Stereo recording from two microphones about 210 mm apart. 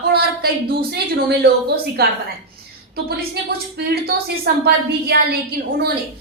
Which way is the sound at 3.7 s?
50° right (ahead or behind).